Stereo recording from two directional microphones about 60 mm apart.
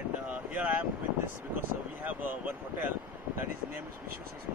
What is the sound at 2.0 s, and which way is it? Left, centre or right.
Speech, right.